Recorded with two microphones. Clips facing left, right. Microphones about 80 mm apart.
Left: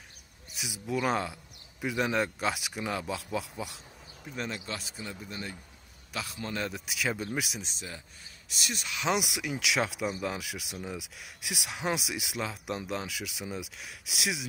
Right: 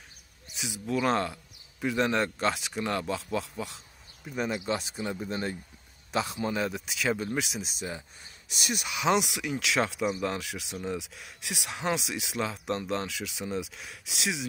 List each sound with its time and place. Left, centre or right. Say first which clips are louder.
0.6 s speech: right 2 dB; centre
4.2 s speech: right 4 dB; centre
4.6 s a man's voice: right 8 dB; right
5.3 s speech: right 7 dB; right
6.1 s a man's voice: right 7 dB; right
6.6 s speech: right 3 dB; centre
8.5 s speech: right 3 dB; centre
9.0 s speech: right 3 dB; centre